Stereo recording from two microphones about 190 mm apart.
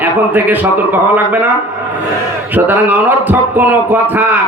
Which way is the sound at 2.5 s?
10° right (ahead or behind).